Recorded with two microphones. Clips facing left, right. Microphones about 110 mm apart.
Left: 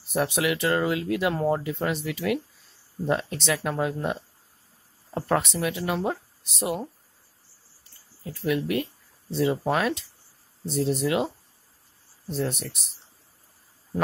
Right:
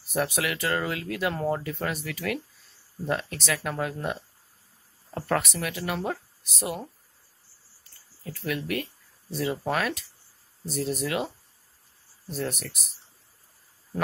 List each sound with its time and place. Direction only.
0.1 s speech: 20° left (ahead or behind)
7.9 s speech: 25° left (ahead or behind)